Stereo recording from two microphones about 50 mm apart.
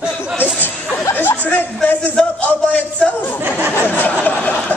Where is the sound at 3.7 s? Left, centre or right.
Left.